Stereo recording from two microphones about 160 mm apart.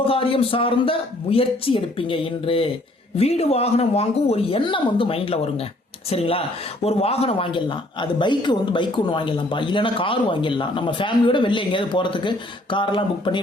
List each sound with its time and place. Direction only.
0.1 s speech: 35° left (ahead or behind)